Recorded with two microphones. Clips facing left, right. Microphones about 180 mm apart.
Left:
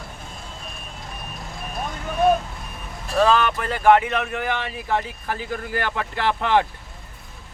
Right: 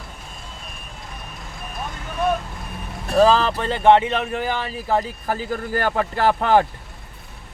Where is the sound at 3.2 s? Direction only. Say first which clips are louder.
Right 3 dB; 30° right (ahead or behind).